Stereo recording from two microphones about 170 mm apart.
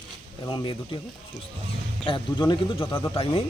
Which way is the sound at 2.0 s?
25° left (ahead or behind).